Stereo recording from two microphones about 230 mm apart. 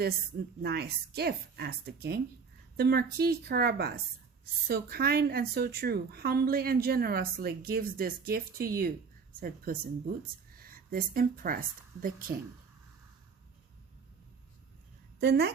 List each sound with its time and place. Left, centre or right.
0.6 s a woman's voice: right
15.2 s a woman's voice: right